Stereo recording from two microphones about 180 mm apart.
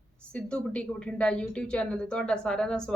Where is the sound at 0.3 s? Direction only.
5° left (ahead or behind).